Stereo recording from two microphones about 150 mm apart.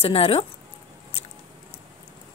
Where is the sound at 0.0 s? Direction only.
40° left (ahead or behind).